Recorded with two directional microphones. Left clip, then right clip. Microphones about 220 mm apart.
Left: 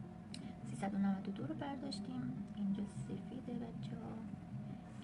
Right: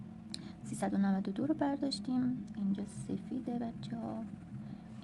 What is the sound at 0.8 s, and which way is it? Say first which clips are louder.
A woman's voice: right 6 dB; 45° right (ahead or behind).